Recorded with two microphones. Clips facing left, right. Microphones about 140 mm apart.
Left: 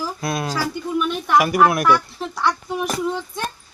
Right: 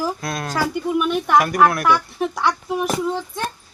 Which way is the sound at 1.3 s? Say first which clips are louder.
Left 1 dB; 5° left (ahead or behind).